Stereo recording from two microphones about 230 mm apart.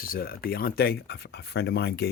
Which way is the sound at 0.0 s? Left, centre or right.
Left.